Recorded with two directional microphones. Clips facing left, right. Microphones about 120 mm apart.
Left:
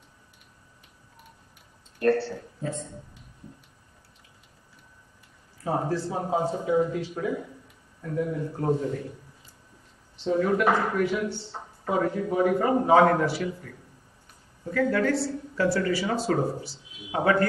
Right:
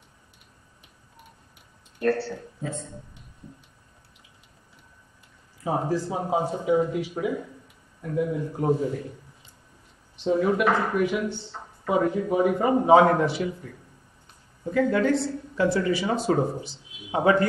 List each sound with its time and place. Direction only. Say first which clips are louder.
2.0 s speech: left 1 dB; centre (ahead or behind)
5.6 s speech: right 1 dB; 15° right (ahead or behind)
10.1 s speech: right 1 dB; 15° right (ahead or behind)